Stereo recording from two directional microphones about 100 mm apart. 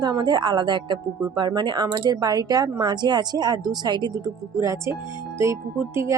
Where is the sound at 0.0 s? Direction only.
45° right (ahead or behind).